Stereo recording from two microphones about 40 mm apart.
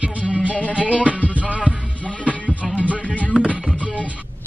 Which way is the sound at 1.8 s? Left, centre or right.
Left.